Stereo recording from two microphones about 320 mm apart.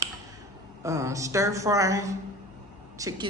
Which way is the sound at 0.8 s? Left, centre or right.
Centre.